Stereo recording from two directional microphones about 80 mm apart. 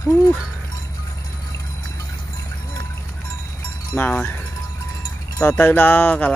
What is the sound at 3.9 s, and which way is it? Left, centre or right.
Cowbell, left.